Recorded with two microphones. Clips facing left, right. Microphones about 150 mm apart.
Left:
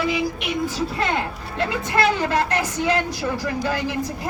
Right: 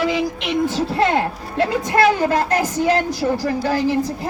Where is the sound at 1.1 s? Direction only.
45° right (ahead or behind).